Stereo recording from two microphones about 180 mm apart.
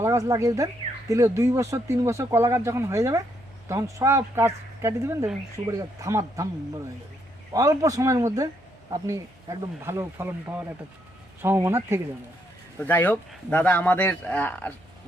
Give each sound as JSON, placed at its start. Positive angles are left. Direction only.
{"t": 0.0, "sound": "speech", "side_deg": -15}
{"t": 7.5, "sound": "speech", "side_deg": -15}
{"t": 12.8, "sound": "a man's voice", "side_deg": 10}